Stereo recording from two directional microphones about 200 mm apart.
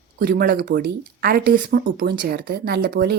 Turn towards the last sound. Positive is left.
turn(degrees=-50)  # may be behind; listen again after turning